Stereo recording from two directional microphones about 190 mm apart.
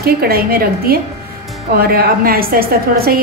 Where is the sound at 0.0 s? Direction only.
55° right (ahead or behind).